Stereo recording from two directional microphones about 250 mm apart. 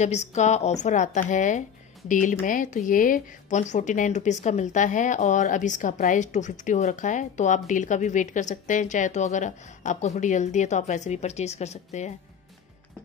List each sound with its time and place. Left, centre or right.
0.0 s a woman's voice: left